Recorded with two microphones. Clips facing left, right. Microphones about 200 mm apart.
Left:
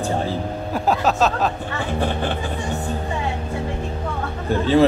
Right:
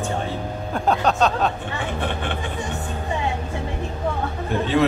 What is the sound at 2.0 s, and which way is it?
Speech, 35° left (ahead or behind).